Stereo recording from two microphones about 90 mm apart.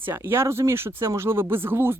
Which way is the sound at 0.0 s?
25° right (ahead or behind).